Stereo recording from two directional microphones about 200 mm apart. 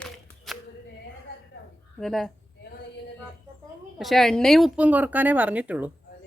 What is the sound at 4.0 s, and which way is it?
A woman's voice, centre (ahead or behind).